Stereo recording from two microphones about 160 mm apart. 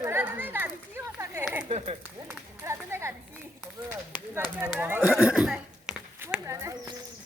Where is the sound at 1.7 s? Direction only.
40° right (ahead or behind).